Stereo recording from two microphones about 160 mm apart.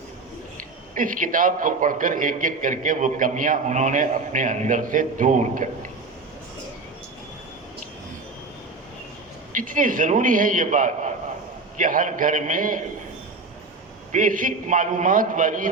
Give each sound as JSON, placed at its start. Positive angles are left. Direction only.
{"t": 0.9, "sound": "a man's voice", "side_deg": -55}
{"t": 9.5, "sound": "a man's voice", "side_deg": -55}
{"t": 14.1, "sound": "a man's voice", "side_deg": -55}